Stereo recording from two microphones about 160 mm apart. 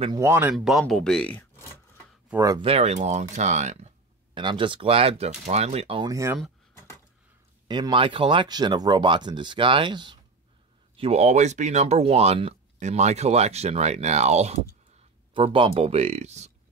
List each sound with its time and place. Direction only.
0.1 s speech: 15° right (ahead or behind); by 1.7 s 10° left (ahead or behind)
2.6 s speech: 40° right (ahead or behind)
4.3 s speech: 30° right (ahead or behind)
6.0 s speech: 20° right (ahead or behind)
7.6 s speech: 30° right (ahead or behind)
11.0 s speech: 40° right (ahead or behind)